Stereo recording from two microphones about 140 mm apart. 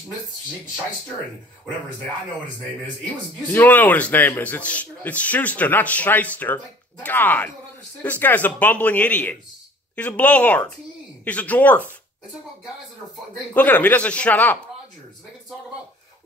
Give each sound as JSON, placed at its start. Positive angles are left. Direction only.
{"t": 3.5, "sound": "speech", "side_deg": 10}
{"t": 13.5, "sound": "speech", "side_deg": 10}